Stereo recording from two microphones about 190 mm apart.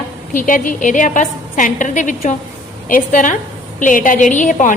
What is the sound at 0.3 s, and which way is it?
A woman's voice, 45° left (ahead or behind).